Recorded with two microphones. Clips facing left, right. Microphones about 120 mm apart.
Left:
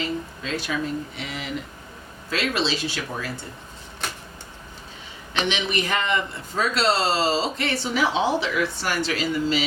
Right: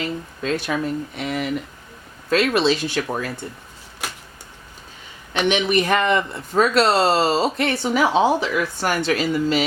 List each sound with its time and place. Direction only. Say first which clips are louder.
0.4 s speech: right 6 dB; 55° right (ahead or behind)
5.3 s speech: right 6 dB; 50° right (ahead or behind)